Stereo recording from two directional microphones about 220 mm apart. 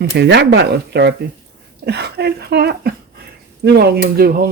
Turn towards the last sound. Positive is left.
turn(degrees=-40)  # may be behind; listen again after turning